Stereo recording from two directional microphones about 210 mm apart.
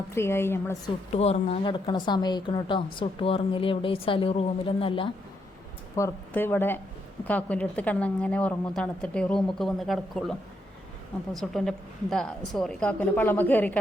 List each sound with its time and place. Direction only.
0.1 s a woman's voice: 10° left (ahead or behind)
1.1 s a woman's voice: 30° left (ahead or behind)
6.0 s a woman's voice: 10° left (ahead or behind)
11.3 s a woman's voice: centre (ahead or behind)